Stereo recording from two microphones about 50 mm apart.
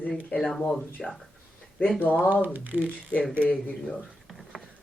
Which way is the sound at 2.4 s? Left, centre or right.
Right.